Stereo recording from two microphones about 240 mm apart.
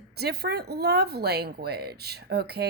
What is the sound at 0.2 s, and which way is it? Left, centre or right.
Speech, right.